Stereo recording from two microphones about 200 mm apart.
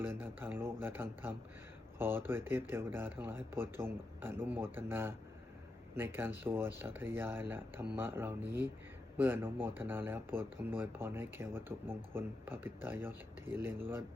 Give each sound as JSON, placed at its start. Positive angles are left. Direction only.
{"t": 0.0, "sound": "speech", "side_deg": -10}